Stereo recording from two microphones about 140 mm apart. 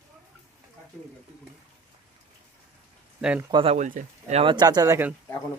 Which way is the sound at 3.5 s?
45° right (ahead or behind).